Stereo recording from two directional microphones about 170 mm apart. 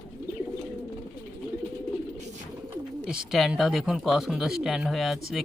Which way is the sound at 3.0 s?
5° right (ahead or behind).